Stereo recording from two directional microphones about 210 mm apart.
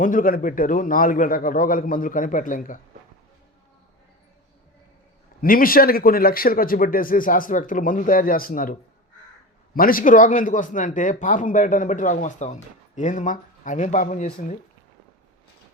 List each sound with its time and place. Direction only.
0.0 s a man's voice: 40° left (ahead or behind)
5.4 s a man's voice: 45° left (ahead or behind)